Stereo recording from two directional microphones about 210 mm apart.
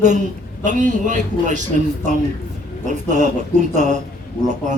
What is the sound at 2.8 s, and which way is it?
Speech, 35° right (ahead or behind).